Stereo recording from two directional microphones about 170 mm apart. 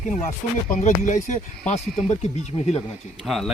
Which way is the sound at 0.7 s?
50° left (ahead or behind).